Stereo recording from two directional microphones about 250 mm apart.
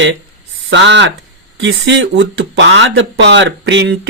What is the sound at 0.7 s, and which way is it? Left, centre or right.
Speech, right.